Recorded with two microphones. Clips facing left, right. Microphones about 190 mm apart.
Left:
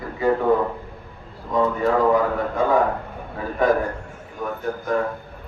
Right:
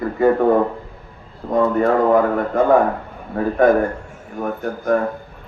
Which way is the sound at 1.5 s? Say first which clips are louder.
Right 4 dB; 55° right (ahead or behind).